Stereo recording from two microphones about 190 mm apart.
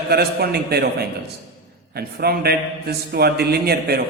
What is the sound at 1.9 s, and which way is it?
A man's voice, 55° right (ahead or behind).